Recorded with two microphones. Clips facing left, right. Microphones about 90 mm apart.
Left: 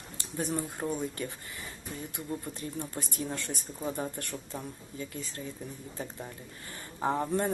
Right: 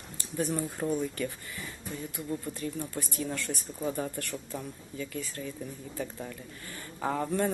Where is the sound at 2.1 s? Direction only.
25° left (ahead or behind).